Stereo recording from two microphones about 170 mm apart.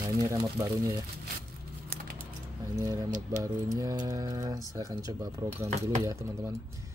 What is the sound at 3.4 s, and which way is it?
Speech, 20° right (ahead or behind).